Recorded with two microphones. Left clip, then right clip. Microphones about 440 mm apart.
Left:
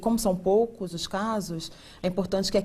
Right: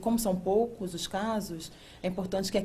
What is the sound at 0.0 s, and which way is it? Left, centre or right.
Speech, left.